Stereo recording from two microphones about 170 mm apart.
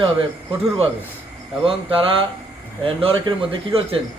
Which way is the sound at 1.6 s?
30° right (ahead or behind).